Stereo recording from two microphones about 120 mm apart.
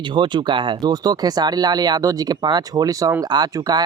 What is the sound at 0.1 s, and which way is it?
Speech, 40° right (ahead or behind).